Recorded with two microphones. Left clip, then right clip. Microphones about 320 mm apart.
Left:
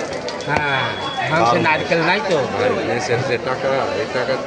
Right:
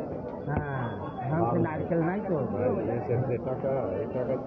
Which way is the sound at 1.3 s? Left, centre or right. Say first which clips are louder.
Left 13 dB; left.